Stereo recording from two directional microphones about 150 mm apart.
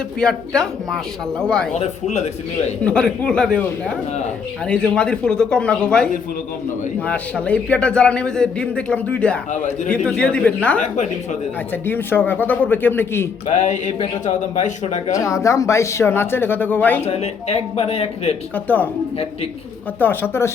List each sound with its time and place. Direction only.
0.2 s speech: 5° left (ahead or behind)
1.8 s speech: 45° left (ahead or behind)
2.8 s a man's voice: 5° left (ahead or behind)
7.0 s a man's voice: 10° left (ahead or behind)
10.9 s speech: 50° left (ahead or behind)
11.7 s a man's voice: 15° left (ahead or behind)
13.5 s speech: 55° left (ahead or behind)
15.1 s a man's voice: 20° left (ahead or behind)
17.0 s speech: 45° left (ahead or behind)
18.5 s a man's voice: 10° left (ahead or behind)
20.0 s a man's voice: 15° left (ahead or behind)